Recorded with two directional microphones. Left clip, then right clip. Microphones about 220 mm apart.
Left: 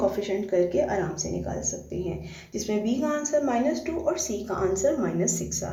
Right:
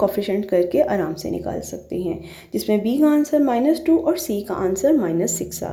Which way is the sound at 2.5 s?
35° right (ahead or behind).